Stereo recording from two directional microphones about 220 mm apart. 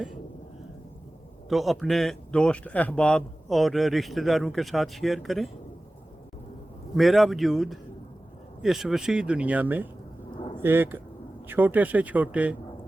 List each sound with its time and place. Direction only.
1.5 s speech: centre (ahead or behind)
6.9 s speech: centre (ahead or behind)
10.3 s a sound: 20° left (ahead or behind)
10.6 s speech: 10° right (ahead or behind)